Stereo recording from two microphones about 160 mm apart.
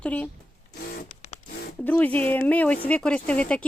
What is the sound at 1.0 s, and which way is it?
Printer, 45° left (ahead or behind).